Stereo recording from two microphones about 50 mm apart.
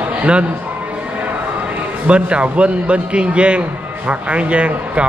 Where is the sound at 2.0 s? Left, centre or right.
Right.